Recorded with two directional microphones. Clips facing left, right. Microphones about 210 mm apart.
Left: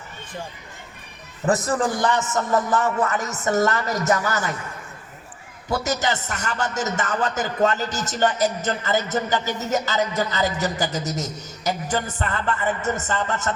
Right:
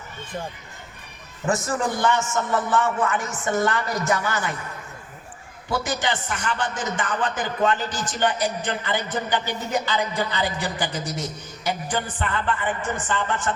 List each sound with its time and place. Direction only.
1.5 s a man's voice: 35° left (ahead or behind)
5.8 s a man's voice: 40° left (ahead or behind)